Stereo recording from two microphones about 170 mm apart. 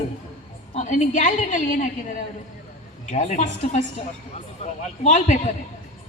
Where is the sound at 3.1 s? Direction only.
45° left (ahead or behind).